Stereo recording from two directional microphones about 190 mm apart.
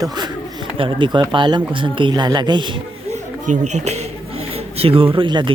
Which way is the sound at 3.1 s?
40° right (ahead or behind).